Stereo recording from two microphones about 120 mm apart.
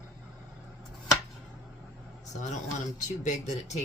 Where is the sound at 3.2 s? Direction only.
75° left (ahead or behind).